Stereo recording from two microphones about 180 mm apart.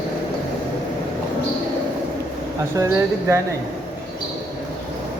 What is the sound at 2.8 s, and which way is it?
Speech, 15° right (ahead or behind).